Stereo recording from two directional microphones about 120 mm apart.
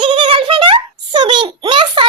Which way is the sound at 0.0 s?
45° right (ahead or behind).